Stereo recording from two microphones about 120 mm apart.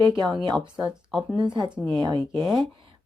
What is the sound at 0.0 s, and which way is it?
Speech, centre (ahead or behind).